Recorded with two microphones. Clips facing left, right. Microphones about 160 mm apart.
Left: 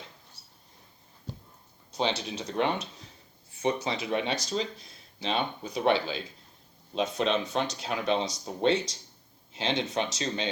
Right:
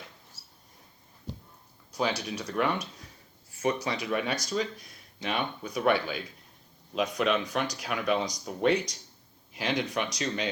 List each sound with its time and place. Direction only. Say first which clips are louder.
2.0 s speech: even; 25° left (ahead or behind)